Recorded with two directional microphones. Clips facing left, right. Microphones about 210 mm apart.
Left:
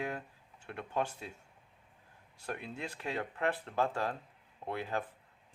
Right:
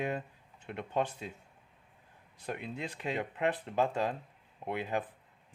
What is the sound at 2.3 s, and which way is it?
Speech, 20° right (ahead or behind).